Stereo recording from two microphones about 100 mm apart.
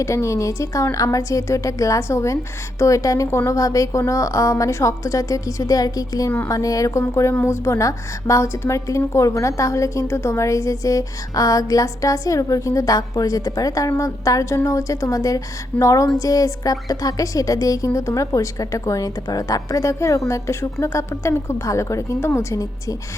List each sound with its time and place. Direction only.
0.0 s a woman's voice: 30° left (ahead or behind)